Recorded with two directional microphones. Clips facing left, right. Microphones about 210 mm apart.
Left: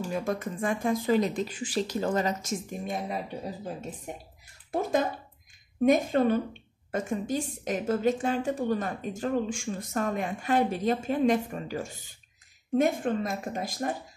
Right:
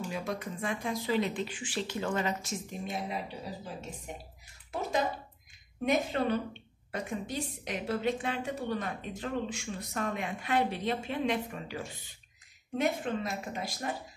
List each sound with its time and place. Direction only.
0.1 s a woman's voice: 50° left (ahead or behind)
5.9 s a woman's voice: 45° left (ahead or behind)